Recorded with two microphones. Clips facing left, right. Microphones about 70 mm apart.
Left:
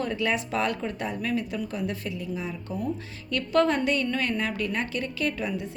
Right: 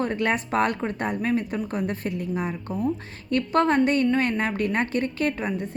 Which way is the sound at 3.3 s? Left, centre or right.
Right.